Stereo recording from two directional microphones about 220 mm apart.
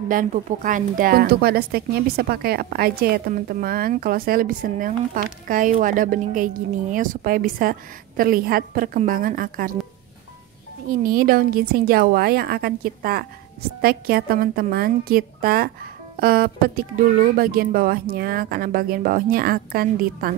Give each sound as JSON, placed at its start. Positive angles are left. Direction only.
{"t": 0.1, "sound": "speech", "side_deg": -35}
{"t": 10.9, "sound": "a woman's voice", "side_deg": -40}